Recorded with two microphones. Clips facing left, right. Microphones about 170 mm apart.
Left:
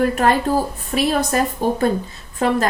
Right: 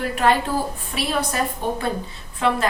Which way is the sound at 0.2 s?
45° left (ahead or behind).